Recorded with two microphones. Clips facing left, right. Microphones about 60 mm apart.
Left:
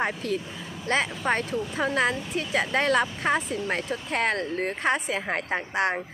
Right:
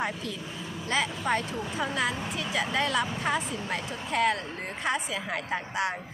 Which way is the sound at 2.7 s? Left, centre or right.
Left.